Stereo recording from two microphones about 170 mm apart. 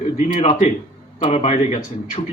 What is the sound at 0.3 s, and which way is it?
A man's voice, 35° left (ahead or behind).